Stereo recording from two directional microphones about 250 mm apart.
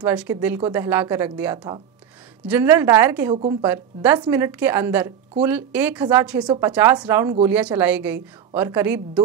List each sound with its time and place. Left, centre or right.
0.0 s a woman's voice: centre
6.4 s a woman's voice: centre
6.7 s a woman's voice: centre